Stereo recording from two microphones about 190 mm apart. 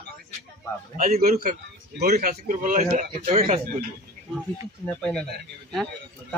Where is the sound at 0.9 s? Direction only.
50° right (ahead or behind).